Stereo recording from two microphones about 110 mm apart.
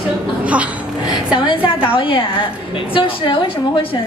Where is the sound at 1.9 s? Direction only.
50° left (ahead or behind).